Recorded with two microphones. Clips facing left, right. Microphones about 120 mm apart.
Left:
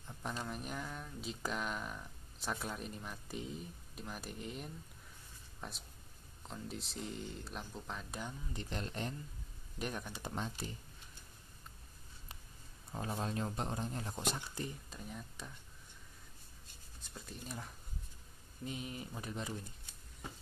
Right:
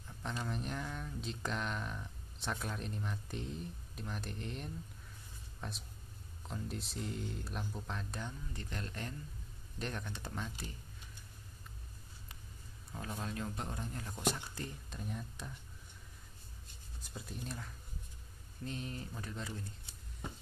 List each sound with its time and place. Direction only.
0.2 s speech: 10° left (ahead or behind)
8.6 s speech: 25° left (ahead or behind)
9.8 s speech: 10° left (ahead or behind)
10.3 s speech: 25° left (ahead or behind)
12.9 s speech: 30° left (ahead or behind)
14.9 s speech: centre (ahead or behind)
17.1 s speech: centre (ahead or behind)
18.6 s speech: 10° left (ahead or behind)